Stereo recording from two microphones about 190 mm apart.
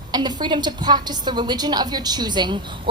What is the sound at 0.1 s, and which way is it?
A woman's voice, 20° right (ahead or behind).